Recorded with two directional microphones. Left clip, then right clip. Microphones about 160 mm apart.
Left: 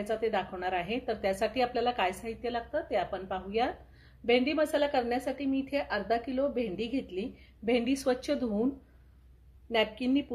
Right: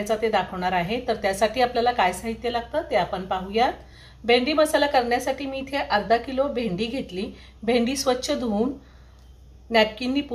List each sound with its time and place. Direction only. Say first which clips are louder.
0.1 s a woman's voice: right 8 dB; 55° left (ahead or behind)
9.7 s a woman's voice: right 8 dB; 55° left (ahead or behind)